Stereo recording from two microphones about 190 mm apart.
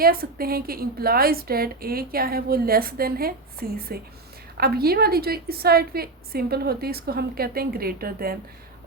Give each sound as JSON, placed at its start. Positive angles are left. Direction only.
{"t": 0.0, "sound": "a woman's voice", "side_deg": -50}